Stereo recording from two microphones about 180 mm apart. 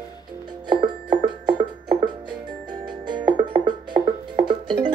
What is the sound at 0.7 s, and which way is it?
Music, 25° right (ahead or behind).